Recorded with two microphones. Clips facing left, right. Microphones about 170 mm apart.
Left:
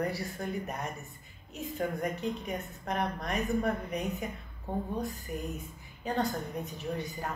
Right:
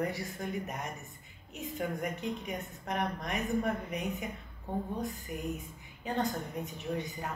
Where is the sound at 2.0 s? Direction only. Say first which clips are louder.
Left 2 dB; 35° left (ahead or behind).